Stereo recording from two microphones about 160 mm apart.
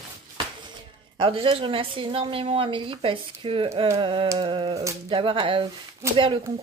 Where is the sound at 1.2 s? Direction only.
35° right (ahead or behind).